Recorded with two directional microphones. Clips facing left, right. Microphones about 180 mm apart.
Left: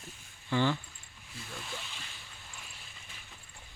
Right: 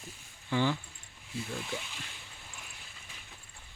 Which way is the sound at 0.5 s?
10° right (ahead or behind).